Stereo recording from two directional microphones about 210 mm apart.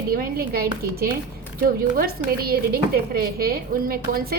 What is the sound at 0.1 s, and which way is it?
A woman's voice, 45° right (ahead or behind).